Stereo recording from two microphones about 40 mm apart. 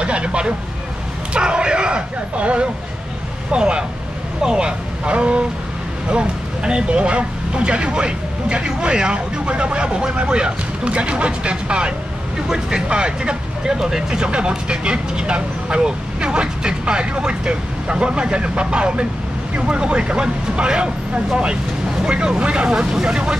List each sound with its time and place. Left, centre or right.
0.0 s speech: right
22.0 s speech: centre